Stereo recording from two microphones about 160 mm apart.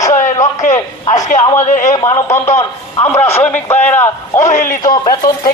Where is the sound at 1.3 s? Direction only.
55° left (ahead or behind).